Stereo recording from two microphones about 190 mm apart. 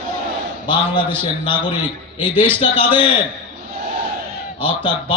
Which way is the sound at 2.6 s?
25° left (ahead or behind).